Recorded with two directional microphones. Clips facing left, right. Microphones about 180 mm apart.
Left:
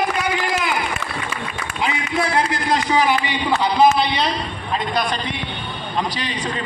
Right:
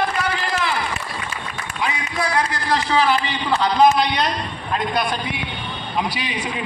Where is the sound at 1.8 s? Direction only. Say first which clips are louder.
Left 2 dB; 25° left (ahead or behind).